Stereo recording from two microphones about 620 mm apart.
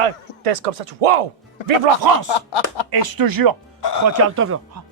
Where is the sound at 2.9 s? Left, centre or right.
Right.